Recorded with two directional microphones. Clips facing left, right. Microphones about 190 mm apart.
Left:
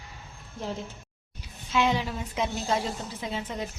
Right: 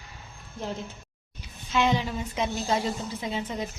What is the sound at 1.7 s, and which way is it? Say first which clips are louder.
A woman's voice: right 1 dB; 5° left (ahead or behind).